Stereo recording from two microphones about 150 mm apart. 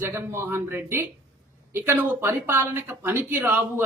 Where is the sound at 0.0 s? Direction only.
15° right (ahead or behind).